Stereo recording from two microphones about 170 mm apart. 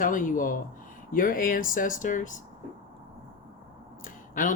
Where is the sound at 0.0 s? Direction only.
50° left (ahead or behind).